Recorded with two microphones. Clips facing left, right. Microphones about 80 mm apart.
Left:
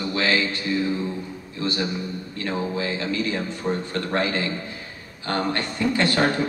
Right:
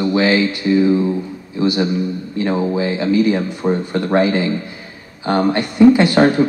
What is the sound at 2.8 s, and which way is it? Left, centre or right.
Speech, centre.